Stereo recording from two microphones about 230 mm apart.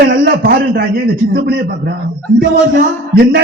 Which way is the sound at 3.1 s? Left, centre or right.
Right.